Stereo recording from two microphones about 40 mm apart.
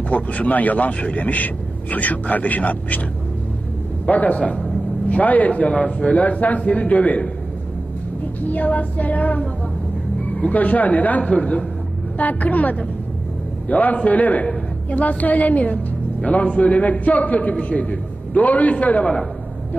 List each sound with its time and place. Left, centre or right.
0.1 s speech: left
4.0 s a man's voice: left
4.4 s a man's voice: left
5.2 s speech: left
8.4 s music: left
10.5 s speech: left
12.2 s music: left
14.9 s speech: left